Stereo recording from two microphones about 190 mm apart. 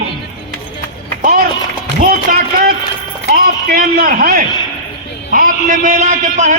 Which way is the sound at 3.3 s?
50° right (ahead or behind).